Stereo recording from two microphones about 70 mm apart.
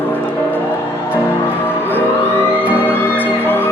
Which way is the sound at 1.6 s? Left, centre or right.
Left.